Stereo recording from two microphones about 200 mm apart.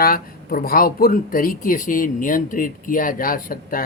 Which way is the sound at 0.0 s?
45° left (ahead or behind).